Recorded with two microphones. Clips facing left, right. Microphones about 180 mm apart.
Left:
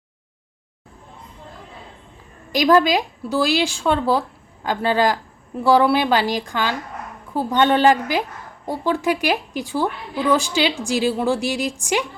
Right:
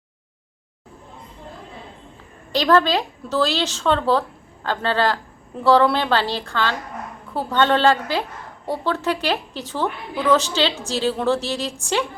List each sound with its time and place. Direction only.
2.5 s a woman's voice: 15° left (ahead or behind)